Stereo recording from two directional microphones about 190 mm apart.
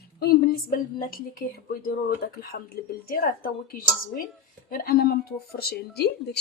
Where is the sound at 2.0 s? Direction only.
55° left (ahead or behind).